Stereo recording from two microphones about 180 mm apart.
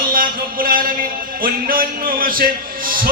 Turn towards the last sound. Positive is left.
turn(degrees=-50)  # may be behind; listen again after turning